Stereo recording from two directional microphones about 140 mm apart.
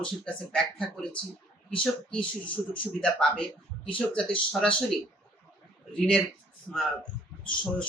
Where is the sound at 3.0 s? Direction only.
5° left (ahead or behind).